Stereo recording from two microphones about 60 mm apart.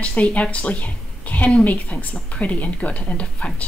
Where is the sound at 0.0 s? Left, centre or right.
Left.